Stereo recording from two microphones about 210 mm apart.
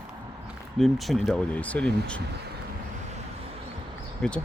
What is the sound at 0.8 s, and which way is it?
Speech, centre (ahead or behind).